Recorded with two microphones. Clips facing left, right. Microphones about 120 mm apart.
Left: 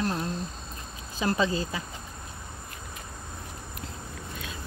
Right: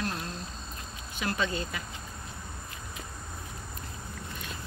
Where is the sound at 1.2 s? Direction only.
30° left (ahead or behind).